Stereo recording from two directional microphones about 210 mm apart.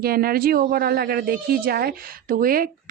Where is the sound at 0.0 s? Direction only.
45° right (ahead or behind).